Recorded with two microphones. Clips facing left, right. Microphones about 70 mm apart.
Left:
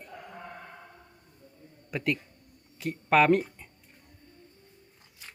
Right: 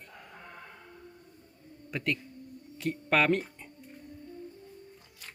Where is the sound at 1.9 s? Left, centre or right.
Centre.